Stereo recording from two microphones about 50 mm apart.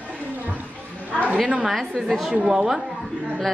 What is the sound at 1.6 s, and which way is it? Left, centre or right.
A woman's voice, centre.